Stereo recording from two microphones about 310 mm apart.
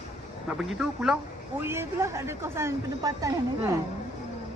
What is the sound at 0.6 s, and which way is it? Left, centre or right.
Speech, centre.